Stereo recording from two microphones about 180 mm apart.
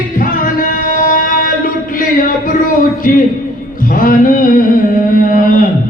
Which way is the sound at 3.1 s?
50° left (ahead or behind).